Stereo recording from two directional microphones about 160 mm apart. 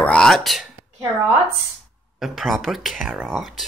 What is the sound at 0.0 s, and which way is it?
Throat clearing, 5° left (ahead or behind).